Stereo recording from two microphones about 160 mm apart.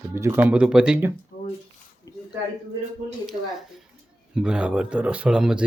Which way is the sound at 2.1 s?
20° left (ahead or behind).